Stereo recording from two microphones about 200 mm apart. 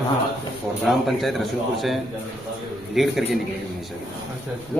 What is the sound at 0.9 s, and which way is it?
Speech, centre (ahead or behind).